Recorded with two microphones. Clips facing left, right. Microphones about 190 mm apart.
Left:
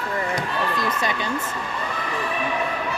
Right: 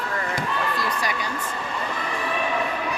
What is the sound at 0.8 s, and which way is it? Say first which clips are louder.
Speech: left 2 dB; 20° left (ahead or behind).